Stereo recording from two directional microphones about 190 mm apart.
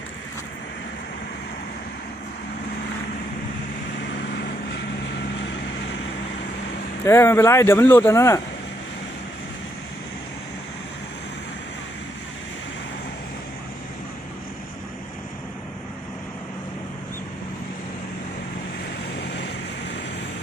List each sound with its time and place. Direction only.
7.0 s speech: 15° left (ahead or behind)
19.2 s vehicle: 60° left (ahead or behind)